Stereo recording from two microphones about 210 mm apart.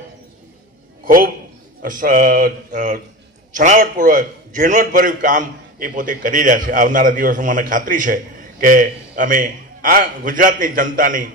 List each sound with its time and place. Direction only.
1.0 s a man's voice: 45° right (ahead or behind)